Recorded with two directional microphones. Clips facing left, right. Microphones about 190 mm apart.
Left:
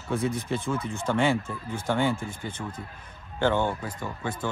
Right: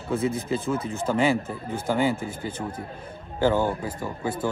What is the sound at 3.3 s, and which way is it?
Speech, 5° right (ahead or behind).